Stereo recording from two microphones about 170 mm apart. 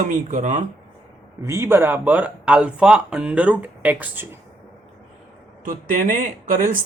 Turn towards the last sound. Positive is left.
turn(degrees=-50)  # may be behind; listen again after turning